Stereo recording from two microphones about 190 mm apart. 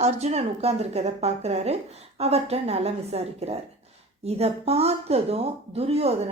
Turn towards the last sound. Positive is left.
turn(degrees=-30)  # may be behind; listen again after turning